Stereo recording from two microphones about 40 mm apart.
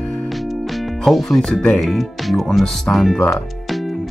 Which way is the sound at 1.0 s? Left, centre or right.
Centre.